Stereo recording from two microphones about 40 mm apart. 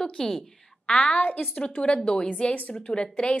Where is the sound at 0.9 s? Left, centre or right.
Left.